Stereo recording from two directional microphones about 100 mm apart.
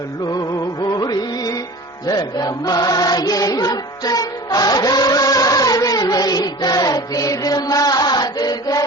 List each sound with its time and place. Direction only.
0.3 s music: 40° left (ahead or behind)